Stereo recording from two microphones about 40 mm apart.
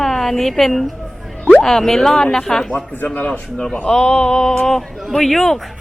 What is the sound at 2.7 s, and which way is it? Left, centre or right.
Speech, left.